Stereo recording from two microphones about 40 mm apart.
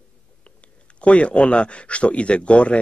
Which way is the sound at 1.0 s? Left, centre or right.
Left.